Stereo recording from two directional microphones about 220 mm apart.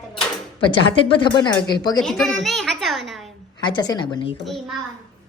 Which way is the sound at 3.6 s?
20° left (ahead or behind).